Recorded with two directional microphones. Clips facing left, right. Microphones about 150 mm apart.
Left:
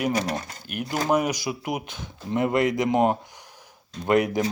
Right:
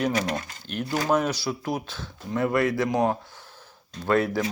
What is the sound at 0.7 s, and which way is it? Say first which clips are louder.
Speech: even; 15° left (ahead or behind).